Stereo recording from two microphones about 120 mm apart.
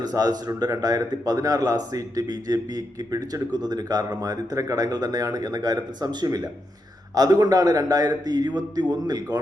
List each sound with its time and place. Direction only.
0.0 s speech: 35° right (ahead or behind)